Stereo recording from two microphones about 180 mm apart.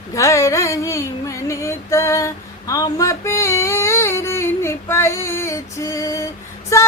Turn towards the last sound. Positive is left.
turn(degrees=15)  # may be behind; listen again after turning